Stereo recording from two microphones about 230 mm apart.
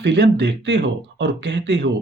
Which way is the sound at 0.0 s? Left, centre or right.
Right.